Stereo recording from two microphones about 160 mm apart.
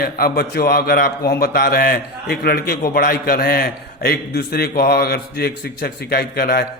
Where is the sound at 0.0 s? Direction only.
75° left (ahead or behind).